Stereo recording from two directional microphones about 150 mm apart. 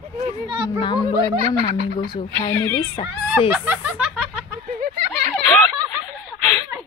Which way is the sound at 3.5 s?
10° right (ahead or behind).